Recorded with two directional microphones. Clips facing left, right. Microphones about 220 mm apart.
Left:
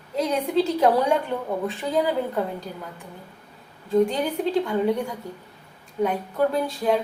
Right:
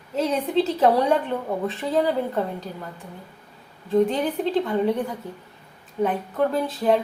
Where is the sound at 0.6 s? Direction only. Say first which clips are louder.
Right 1 dB; centre (ahead or behind).